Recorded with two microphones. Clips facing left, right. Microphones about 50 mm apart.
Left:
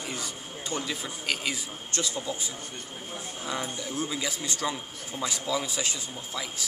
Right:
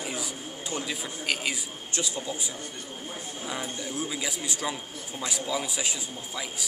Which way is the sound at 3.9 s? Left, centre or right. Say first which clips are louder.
Left 1 dB; centre.